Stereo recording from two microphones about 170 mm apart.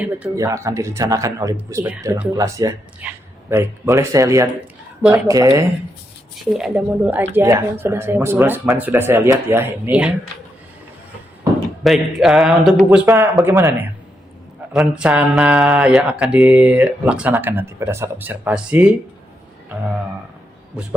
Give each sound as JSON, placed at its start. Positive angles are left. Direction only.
{"t": 0.3, "sound": "speech", "side_deg": -15}
{"t": 6.5, "sound": "speech", "side_deg": -5}
{"t": 11.8, "sound": "a man's voice", "side_deg": 0}
{"t": 13.1, "sound": "speech", "side_deg": -15}
{"t": 20.8, "sound": "a man's voice", "side_deg": -5}